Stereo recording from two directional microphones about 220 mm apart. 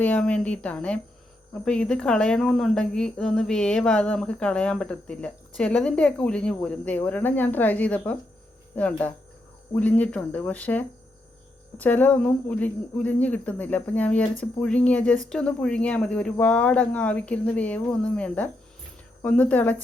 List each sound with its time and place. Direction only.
0.0 s speech: 5° left (ahead or behind)